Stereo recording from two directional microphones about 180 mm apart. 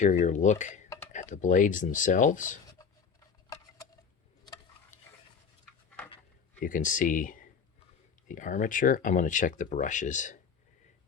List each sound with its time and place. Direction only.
0.0 s speech: 45° left (ahead or behind)
2.8 s a sound: 20° left (ahead or behind)
6.6 s speech: 45° left (ahead or behind)